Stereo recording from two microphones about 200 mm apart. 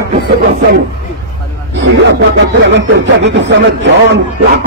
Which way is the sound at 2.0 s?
65° right (ahead or behind).